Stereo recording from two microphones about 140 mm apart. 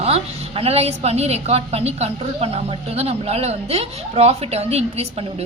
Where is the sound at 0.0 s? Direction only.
45° right (ahead or behind).